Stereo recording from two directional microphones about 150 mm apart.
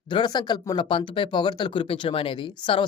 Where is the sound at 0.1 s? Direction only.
30° left (ahead or behind).